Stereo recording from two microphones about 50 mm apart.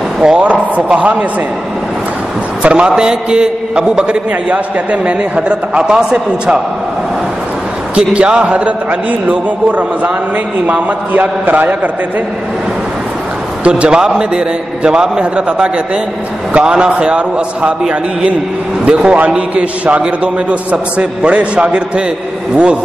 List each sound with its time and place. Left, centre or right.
0.2 s a man's voice: right
2.6 s a man's voice: right
7.9 s a man's voice: right
13.7 s a man's voice: centre